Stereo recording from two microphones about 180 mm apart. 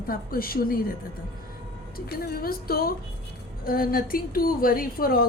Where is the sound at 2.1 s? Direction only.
60° left (ahead or behind).